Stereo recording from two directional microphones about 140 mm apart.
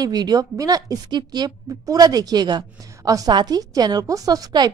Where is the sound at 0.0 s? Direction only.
30° right (ahead or behind).